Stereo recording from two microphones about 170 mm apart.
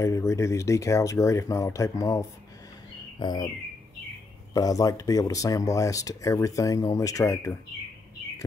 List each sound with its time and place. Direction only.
0.0 s speech: 15° left (ahead or behind)
4.6 s speech: 20° left (ahead or behind)